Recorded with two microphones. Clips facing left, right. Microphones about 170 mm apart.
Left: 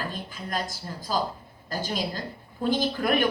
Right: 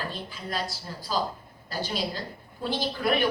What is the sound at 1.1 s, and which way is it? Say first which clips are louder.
A woman's voice: left 1 dB; 50° left (ahead or behind).